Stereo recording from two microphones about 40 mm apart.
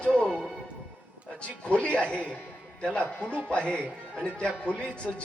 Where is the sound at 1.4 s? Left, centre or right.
Left.